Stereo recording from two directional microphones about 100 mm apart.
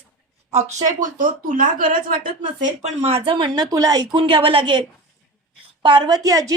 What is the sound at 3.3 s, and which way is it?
Speech, 50° right (ahead or behind).